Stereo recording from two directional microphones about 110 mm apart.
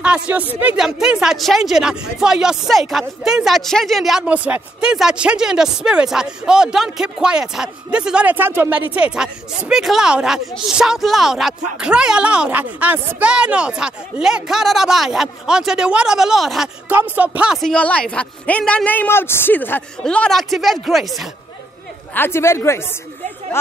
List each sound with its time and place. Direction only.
0.0 s speech: 10° right (ahead or behind)
16.9 s speech: 15° right (ahead or behind)
17.6 s speech: 10° left (ahead or behind)
20.0 s speech: 10° left (ahead or behind)
22.1 s a woman's voice: 20° left (ahead or behind)